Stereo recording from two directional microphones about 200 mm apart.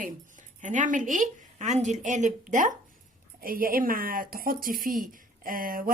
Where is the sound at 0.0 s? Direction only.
40° right (ahead or behind).